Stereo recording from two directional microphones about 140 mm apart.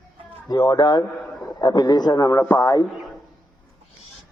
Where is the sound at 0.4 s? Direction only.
30° left (ahead or behind).